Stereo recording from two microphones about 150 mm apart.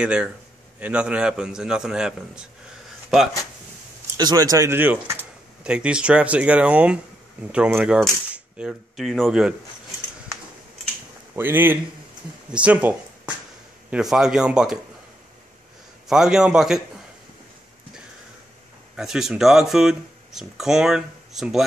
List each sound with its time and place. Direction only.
0.0 s speech: 10° right (ahead or behind)
4.2 s speech: 25° right (ahead or behind); by 9.6 s 5° right (ahead or behind)
11.3 s speech: 15° right (ahead or behind)
16.1 s speech: 5° right (ahead or behind)
18.9 s speech: 5° right (ahead or behind)